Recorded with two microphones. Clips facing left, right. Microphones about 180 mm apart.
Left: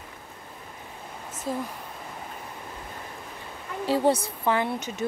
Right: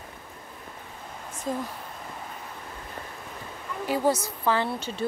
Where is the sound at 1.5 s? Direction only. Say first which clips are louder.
Even; 5° left (ahead or behind).